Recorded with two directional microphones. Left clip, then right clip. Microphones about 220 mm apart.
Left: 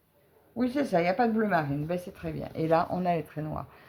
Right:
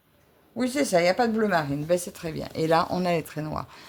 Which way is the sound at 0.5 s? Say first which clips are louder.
Right 4 dB; 35° right (ahead or behind).